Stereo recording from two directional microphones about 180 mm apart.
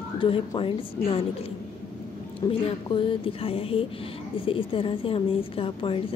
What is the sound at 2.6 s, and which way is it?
A woman's voice, 30° left (ahead or behind).